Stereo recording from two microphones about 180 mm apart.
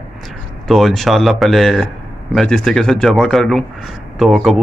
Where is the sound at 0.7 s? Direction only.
Centre (ahead or behind).